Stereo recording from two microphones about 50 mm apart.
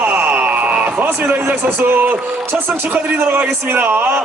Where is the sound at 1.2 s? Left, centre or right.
Right.